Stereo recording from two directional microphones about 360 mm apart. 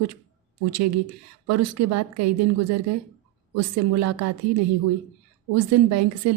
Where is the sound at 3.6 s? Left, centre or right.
Right.